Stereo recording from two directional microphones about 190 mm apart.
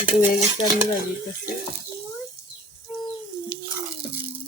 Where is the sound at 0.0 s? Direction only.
5° right (ahead or behind).